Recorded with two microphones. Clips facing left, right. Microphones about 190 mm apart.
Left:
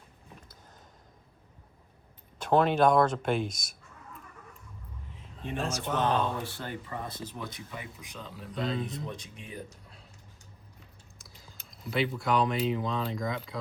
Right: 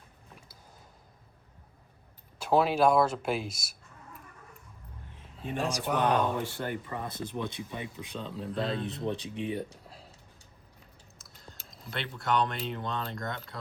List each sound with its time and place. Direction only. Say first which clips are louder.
2.4 s speech: left 1 dB; 5° right (ahead or behind)
5.4 s speech: right 1 dB; 10° right (ahead or behind)
7.3 s speech: right 5 dB; 25° right (ahead or behind)
8.5 s a man's voice: left 1 dB; centre (ahead or behind)
9.0 s speech: right 9 dB; 30° right (ahead or behind)
11.2 s speech: right 3 dB; centre (ahead or behind)